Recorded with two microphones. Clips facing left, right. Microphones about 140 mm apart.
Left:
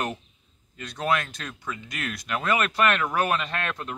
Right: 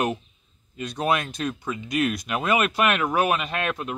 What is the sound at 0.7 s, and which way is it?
Speech, 15° right (ahead or behind).